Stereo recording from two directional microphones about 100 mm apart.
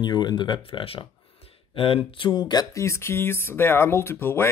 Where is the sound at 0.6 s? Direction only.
65° left (ahead or behind); by 2.6 s 50° left (ahead or behind).